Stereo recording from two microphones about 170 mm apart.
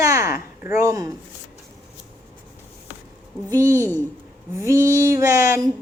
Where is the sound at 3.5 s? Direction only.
15° right (ahead or behind).